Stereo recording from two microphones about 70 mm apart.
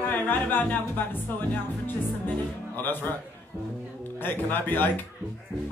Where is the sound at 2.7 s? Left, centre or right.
Left.